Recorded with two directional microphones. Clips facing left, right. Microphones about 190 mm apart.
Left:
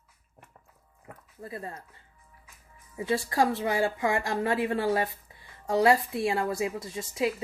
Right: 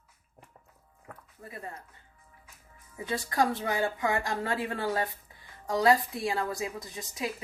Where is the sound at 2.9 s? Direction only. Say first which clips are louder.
Left 3 dB; 25° left (ahead or behind).